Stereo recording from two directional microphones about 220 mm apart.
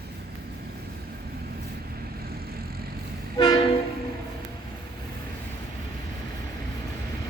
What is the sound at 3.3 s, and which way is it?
Train, 20° left (ahead or behind).